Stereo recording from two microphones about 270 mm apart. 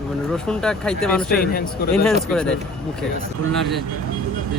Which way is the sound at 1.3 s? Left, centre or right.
Left.